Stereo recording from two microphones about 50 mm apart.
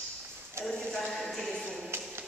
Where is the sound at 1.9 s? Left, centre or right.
Right.